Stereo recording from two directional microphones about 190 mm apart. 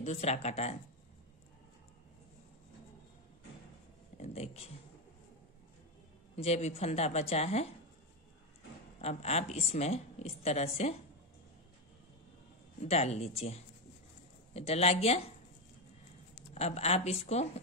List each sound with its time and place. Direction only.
0.0 s a woman's voice: 35° left (ahead or behind)
4.2 s a woman's voice: 35° left (ahead or behind)
6.3 s a woman's voice: 35° left (ahead or behind)
9.0 s a woman's voice: 35° left (ahead or behind)
12.8 s a woman's voice: 35° left (ahead or behind)
16.5 s a woman's voice: 35° left (ahead or behind)